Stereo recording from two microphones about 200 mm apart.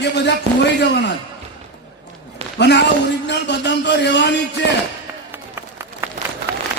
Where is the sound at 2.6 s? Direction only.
60° left (ahead or behind).